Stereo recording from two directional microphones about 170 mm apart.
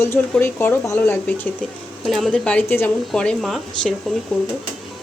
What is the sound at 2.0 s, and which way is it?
Speech, centre (ahead or behind).